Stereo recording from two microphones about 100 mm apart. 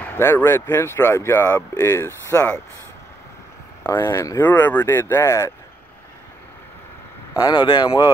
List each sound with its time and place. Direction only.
0.0 s speech: 25° left (ahead or behind)
3.9 s speech: 30° left (ahead or behind)
4.4 s speech: 20° left (ahead or behind)
7.3 s speech: 45° left (ahead or behind)